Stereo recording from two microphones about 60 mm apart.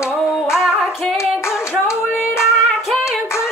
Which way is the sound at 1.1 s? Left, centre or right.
Left.